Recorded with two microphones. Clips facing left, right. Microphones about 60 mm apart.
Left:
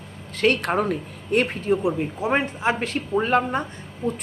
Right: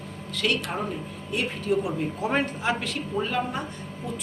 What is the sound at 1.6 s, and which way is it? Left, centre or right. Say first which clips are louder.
A man's voice: left 3 dB; left.